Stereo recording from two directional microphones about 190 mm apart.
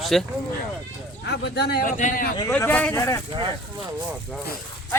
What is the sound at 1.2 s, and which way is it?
Speech, 60° left (ahead or behind).